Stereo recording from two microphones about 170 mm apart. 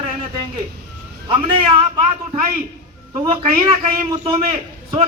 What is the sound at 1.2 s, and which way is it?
Speech, 30° right (ahead or behind).